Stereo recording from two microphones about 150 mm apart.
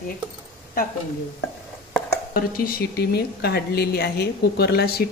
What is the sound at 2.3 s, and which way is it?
A woman's voice, 85° left.